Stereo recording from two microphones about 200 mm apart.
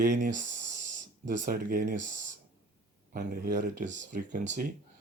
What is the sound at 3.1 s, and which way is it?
Speech, 45° right (ahead or behind).